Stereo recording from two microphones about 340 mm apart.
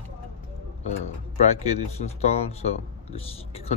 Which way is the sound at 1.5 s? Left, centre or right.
Centre.